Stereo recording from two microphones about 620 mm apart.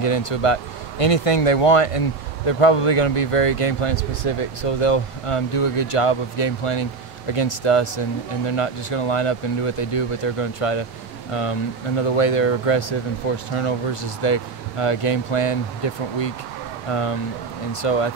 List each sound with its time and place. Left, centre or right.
0.0 s speech: left
12.0 s speech: left